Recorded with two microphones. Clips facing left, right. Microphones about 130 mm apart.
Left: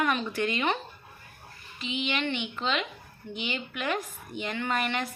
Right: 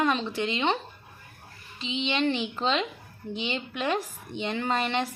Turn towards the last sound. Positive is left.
turn(degrees=-30)  # may be behind; listen again after turning